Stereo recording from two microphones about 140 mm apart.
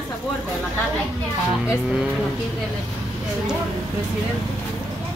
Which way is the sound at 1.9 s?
5° right (ahead or behind).